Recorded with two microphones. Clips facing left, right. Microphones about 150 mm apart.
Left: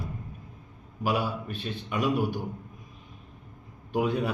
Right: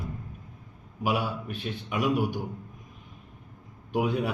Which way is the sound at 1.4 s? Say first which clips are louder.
Even; 10° right (ahead or behind).